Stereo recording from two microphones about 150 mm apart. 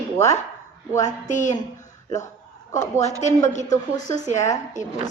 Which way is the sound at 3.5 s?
55° left (ahead or behind).